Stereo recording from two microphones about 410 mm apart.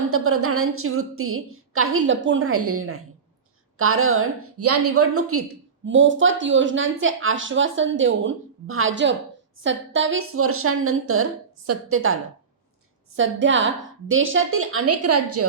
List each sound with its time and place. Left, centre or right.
0.1 s a woman's voice: right